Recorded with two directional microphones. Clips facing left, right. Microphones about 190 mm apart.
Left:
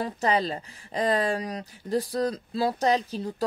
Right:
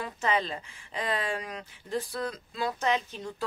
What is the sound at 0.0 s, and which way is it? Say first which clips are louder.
Speech: left 4 dB; 35° left (ahead or behind).